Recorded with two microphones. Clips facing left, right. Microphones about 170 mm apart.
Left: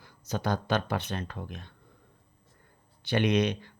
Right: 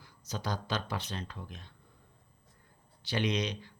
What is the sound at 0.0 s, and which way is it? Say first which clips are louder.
Speech: left 6 dB; 55° left (ahead or behind).